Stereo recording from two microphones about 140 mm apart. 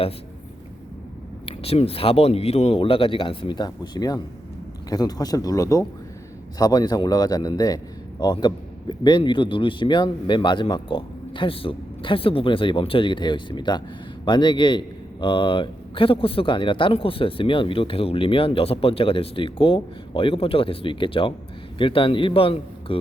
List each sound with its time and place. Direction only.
1.5 s a man's voice: 45° left (ahead or behind)